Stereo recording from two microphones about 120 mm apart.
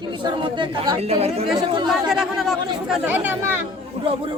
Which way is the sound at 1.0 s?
60° right (ahead or behind).